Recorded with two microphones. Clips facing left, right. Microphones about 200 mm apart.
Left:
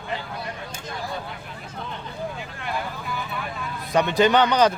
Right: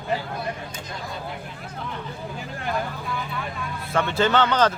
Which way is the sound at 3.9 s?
15° left (ahead or behind).